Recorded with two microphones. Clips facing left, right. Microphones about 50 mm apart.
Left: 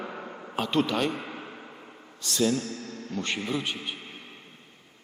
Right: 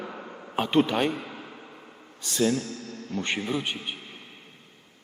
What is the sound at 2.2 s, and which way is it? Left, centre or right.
A man's voice, centre.